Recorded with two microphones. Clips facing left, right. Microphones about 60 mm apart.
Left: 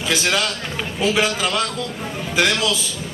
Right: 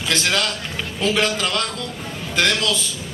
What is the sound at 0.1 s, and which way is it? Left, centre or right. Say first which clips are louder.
A man's voice: left 1 dB; centre.